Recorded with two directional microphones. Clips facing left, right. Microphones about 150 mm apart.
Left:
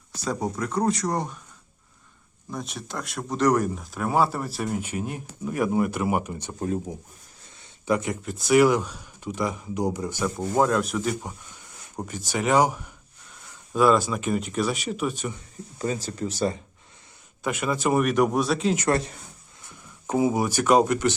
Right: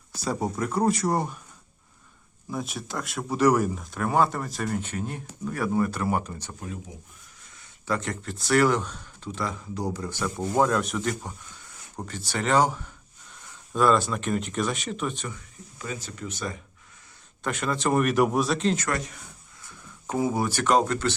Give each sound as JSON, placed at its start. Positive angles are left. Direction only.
{"t": 0.3, "sound": "speech", "side_deg": -5}
{"t": 2.5, "sound": "speech", "side_deg": 0}
{"t": 7.4, "sound": "a sound", "side_deg": 25}
{"t": 7.9, "sound": "speech", "side_deg": 15}
{"t": 10.3, "sound": "speech", "side_deg": 0}
{"t": 15.8, "sound": "speech", "side_deg": 35}
{"t": 17.4, "sound": "speech", "side_deg": 10}
{"t": 18.9, "sound": "speech", "side_deg": 30}
{"t": 20.1, "sound": "speech", "side_deg": 15}